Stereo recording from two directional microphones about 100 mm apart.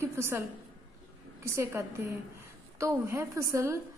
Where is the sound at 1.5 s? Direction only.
30° right (ahead or behind).